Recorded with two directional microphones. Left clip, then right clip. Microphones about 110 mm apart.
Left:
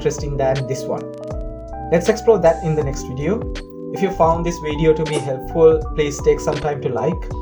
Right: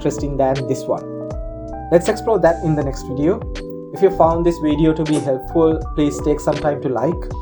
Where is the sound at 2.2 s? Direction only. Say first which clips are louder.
Left 1 dB; 65° right (ahead or behind).